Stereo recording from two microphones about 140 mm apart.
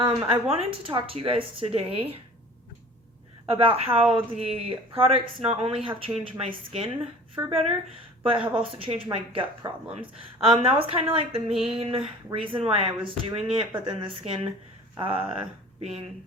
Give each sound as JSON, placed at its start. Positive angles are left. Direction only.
{"t": 0.0, "sound": "a woman's voice", "side_deg": -35}
{"t": 3.5, "sound": "a woman's voice", "side_deg": -40}